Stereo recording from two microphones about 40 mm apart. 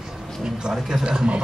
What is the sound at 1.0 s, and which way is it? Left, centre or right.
Speech, right.